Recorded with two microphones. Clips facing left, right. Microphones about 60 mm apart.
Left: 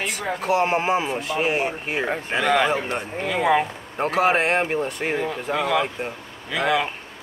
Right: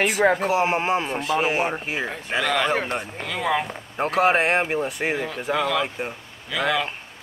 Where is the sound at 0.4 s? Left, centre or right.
Centre.